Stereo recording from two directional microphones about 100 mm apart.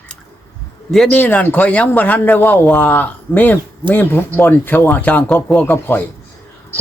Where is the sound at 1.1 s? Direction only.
15° left (ahead or behind).